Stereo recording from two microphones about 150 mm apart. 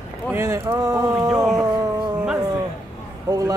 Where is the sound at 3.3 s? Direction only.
25° right (ahead or behind).